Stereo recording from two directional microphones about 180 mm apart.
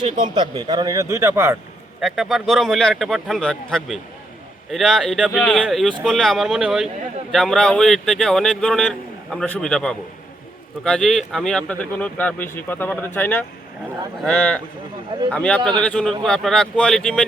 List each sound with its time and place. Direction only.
0.2 s speech: 25° right (ahead or behind)
2.0 s speech: centre (ahead or behind)